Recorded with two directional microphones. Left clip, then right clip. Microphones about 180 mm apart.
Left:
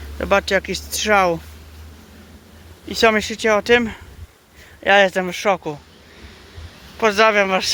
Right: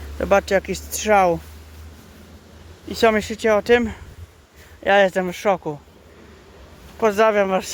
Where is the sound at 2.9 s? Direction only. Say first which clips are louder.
Left 2 dB; 10° right (ahead or behind).